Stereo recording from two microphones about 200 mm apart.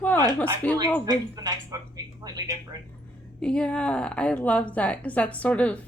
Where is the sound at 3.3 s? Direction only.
5° left (ahead or behind).